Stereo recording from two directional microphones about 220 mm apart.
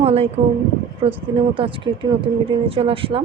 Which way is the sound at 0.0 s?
30° right (ahead or behind).